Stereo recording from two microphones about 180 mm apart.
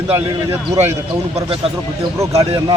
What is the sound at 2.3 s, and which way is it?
Speech, 35° right (ahead or behind).